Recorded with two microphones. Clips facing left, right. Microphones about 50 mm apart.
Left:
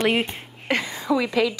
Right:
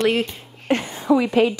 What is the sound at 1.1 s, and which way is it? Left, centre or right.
Speech, right.